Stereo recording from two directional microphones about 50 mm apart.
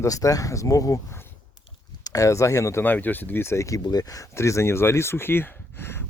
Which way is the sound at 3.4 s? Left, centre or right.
Left.